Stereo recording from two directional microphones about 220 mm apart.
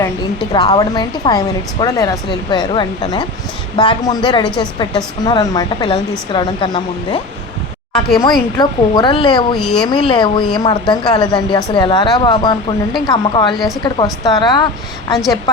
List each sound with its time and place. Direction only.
0.5 s speech: 20° left (ahead or behind)
4.4 s speech: 5° left (ahead or behind)
4.8 s speech: 20° left (ahead or behind)
8.3 s speech: 20° left (ahead or behind)
9.6 s speech: centre (ahead or behind)
9.9 s speech: 20° left (ahead or behind)